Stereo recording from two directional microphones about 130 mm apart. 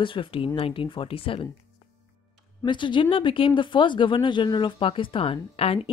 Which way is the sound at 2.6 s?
40° left (ahead or behind).